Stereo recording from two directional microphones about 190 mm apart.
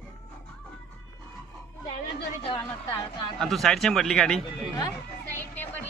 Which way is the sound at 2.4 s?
25° left (ahead or behind).